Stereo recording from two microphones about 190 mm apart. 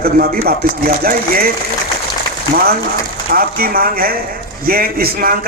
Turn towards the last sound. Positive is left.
turn(degrees=-50)  # may be behind; listen again after turning